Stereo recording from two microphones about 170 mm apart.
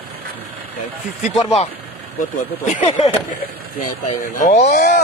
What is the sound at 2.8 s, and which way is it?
Speech, 40° left (ahead or behind).